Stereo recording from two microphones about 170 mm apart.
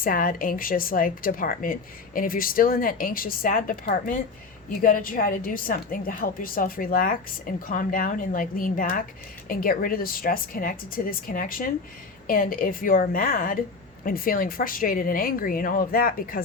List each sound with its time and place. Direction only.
0.0 s a woman's voice: 55° left (ahead or behind)